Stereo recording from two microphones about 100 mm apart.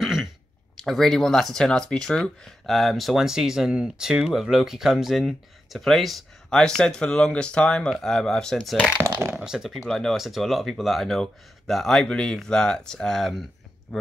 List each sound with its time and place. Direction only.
0.0 s throat clearing: centre (ahead or behind)
0.8 s speech: centre (ahead or behind)
9.3 s speech: 5° right (ahead or behind)